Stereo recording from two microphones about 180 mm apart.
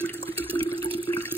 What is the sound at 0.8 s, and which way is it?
Water, 30° right (ahead or behind).